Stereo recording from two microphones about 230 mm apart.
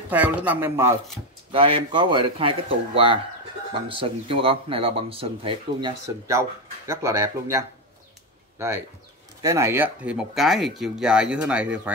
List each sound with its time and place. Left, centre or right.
0.1 s speech: centre
1.5 s speech: right
9.4 s speech: centre